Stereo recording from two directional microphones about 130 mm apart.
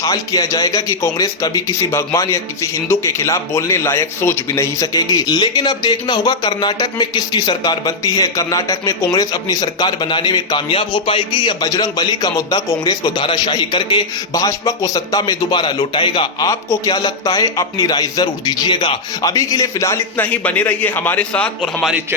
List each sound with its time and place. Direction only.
0.0 s a man's voice: 25° left (ahead or behind)
16.5 s a man's voice: 25° left (ahead or behind); by 21.9 s 5° left (ahead or behind)